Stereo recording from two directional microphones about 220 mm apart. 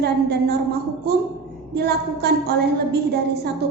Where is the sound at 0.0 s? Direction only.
45° right (ahead or behind).